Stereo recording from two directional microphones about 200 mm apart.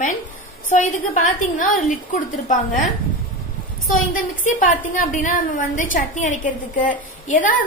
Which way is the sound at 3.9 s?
40° left (ahead or behind).